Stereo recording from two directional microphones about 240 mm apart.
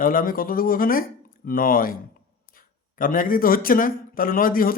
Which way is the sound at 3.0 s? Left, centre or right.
Left.